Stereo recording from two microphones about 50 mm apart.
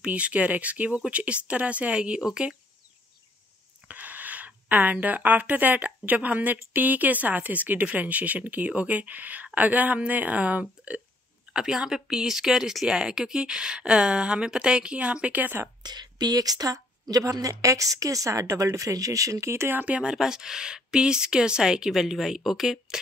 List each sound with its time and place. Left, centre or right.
0.0 s speech: right
3.8 s a sound: right
5.0 s speech: right
11.5 s speech: centre
15.4 s a woman's voice: right
17.2 s a woman's voice: right
19.7 s speech: right
20.0 s speech: centre